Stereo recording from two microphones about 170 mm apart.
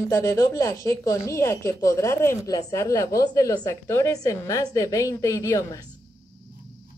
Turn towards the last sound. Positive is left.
turn(degrees=20)  # may be behind; listen again after turning